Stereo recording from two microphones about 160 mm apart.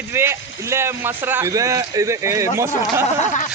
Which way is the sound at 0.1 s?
15° right (ahead or behind).